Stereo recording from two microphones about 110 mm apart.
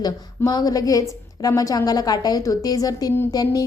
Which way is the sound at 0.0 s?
35° left (ahead or behind).